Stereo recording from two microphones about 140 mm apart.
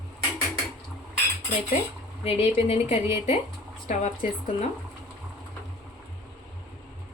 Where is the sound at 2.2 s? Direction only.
45° left (ahead or behind).